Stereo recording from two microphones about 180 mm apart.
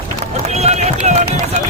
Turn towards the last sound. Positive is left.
turn(degrees=-40)  # may be behind; listen again after turning